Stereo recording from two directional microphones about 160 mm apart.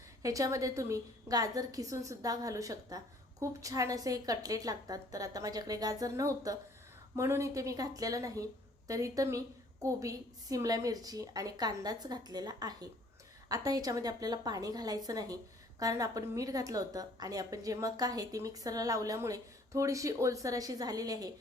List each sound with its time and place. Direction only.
0.2 s a woman's voice: 20° right (ahead or behind)